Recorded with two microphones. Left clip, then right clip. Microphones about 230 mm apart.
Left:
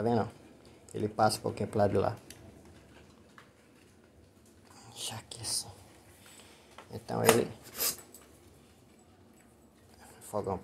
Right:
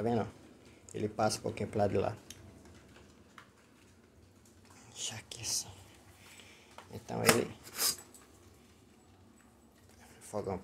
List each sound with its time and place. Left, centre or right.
0.0 s speech: centre
4.7 s whispering: centre
5.3 s speech: centre
6.9 s speech: centre
10.3 s speech: centre